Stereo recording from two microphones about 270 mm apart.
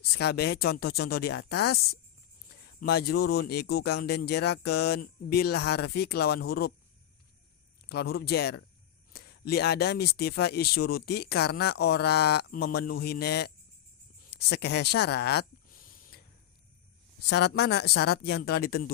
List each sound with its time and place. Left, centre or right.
0.2 s speech: left
7.9 s speech: left
14.3 s a sound: left
17.2 s speech: left